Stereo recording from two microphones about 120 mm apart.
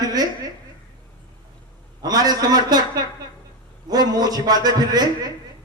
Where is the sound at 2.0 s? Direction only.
35° right (ahead or behind).